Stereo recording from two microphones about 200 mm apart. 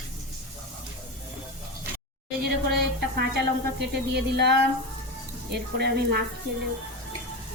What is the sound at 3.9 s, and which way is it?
Speech, 55° right (ahead or behind).